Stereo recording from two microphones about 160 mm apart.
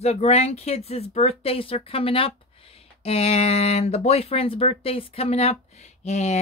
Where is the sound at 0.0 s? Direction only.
40° left (ahead or behind).